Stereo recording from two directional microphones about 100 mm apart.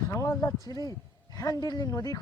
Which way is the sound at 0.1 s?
30° left (ahead or behind).